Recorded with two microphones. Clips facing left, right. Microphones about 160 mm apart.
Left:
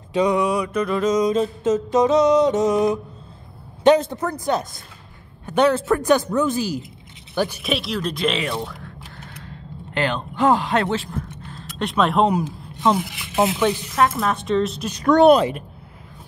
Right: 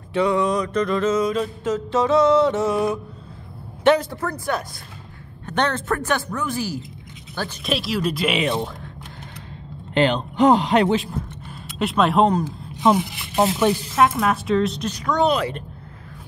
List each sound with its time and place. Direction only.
0.1 s music: 15° left (ahead or behind)
3.8 s a man's voice: 20° left (ahead or behind)
5.5 s music: 5° left (ahead or behind)
7.6 s a woman's voice: centre (ahead or behind)
8.4 s speech: 20° right (ahead or behind)
9.9 s speech: 20° right (ahead or behind); by 12.4 s 5° left (ahead or behind)
13.9 s a woman's voice: centre (ahead or behind)
15.0 s speech: 60° left (ahead or behind)